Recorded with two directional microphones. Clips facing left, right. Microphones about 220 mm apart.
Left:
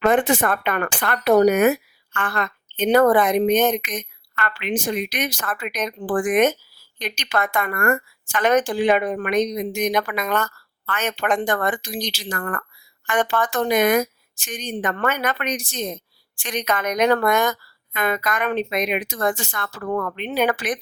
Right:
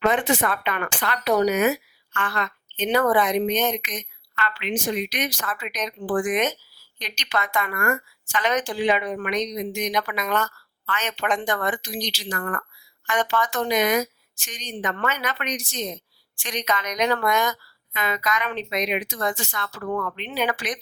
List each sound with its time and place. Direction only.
0.0 s speech: 50° left (ahead or behind)